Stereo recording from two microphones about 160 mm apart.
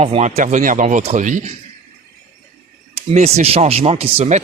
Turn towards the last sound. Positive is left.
turn(degrees=-40)  # may be behind; listen again after turning